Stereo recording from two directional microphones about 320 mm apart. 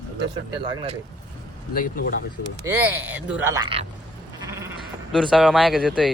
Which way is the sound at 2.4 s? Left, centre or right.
Left.